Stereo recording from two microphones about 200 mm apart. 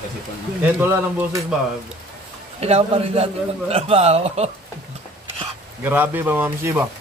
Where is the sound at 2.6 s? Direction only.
30° right (ahead or behind).